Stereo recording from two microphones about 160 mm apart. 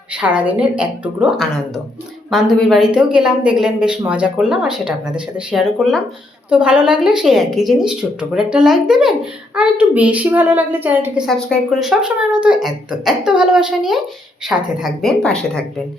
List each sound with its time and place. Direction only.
0.1 s a woman's voice: 5° right (ahead or behind)
11.3 s speech: 5° left (ahead or behind)